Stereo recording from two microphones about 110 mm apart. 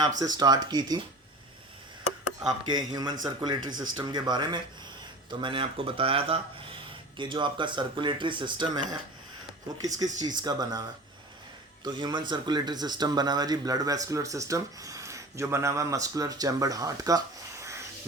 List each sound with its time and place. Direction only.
0.0 s speech: 35° right (ahead or behind)
2.5 s speech: 40° right (ahead or behind)